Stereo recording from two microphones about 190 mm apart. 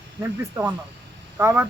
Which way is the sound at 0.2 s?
10° right (ahead or behind).